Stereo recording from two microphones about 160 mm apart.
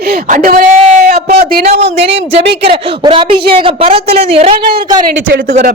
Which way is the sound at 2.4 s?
90° right.